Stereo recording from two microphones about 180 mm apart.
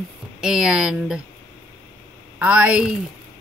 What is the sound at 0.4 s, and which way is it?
Speech, 5° right (ahead or behind).